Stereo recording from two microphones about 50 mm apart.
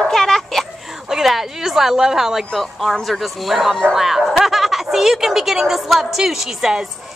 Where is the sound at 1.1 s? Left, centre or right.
Centre.